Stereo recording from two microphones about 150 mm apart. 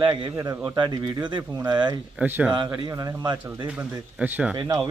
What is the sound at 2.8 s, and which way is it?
Speech, 25° right (ahead or behind).